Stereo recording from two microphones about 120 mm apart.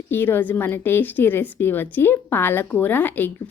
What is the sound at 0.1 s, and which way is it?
A woman's voice, 20° left (ahead or behind).